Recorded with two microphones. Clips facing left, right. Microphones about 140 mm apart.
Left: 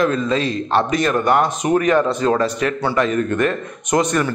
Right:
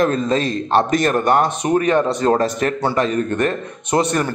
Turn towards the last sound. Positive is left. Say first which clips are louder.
# even
turn(degrees=-35)  # may be behind; listen again after turning